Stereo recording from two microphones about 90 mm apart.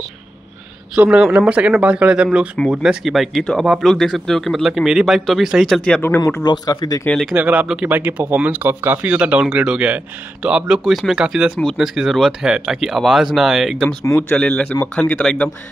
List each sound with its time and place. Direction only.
0.9 s speech: 15° right (ahead or behind); by 6.0 s 10° left (ahead or behind)
6.4 s speech: 50° left (ahead or behind)
7.1 s speech: 5° left (ahead or behind)
7.3 s speech: 15° right (ahead or behind)
14.3 s speech: 10° left (ahead or behind)